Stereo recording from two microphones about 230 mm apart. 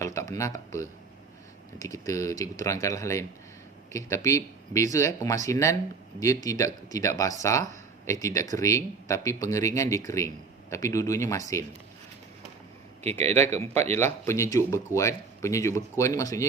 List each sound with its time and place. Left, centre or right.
0.0 s speech: centre
13.0 s speech: right
13.9 s speech: centre